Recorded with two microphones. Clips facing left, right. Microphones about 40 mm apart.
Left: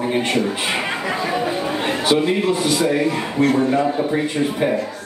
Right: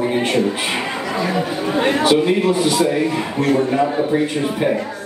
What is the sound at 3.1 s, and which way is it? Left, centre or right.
A man's voice, centre.